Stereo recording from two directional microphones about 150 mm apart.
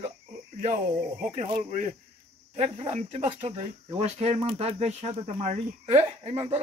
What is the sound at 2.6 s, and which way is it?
Speech, 45° right (ahead or behind).